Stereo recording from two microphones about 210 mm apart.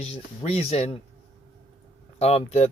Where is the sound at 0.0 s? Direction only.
30° left (ahead or behind).